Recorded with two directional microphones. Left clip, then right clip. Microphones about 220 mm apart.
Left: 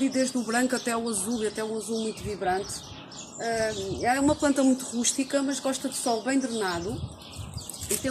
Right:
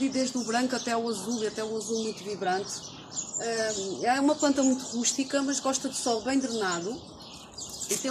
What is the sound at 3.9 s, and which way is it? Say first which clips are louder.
Speech: left 1 dB; 25° left (ahead or behind).